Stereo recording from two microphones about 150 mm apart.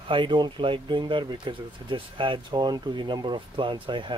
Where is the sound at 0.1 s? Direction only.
35° right (ahead or behind).